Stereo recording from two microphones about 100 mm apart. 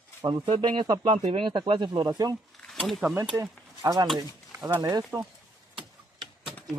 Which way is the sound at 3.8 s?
45° right (ahead or behind).